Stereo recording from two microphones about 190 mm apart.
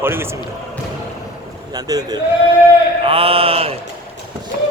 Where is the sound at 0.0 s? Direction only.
10° right (ahead or behind).